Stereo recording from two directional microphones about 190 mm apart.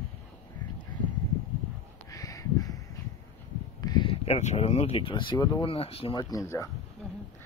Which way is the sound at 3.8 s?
25° left (ahead or behind).